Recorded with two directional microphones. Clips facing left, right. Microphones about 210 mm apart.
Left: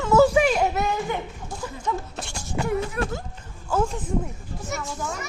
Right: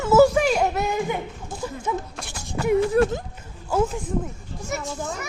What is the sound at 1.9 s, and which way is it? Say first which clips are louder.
Speech: right 1 dB; 10° right (ahead or behind).